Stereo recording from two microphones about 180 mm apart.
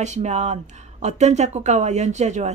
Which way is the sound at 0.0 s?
40° right (ahead or behind).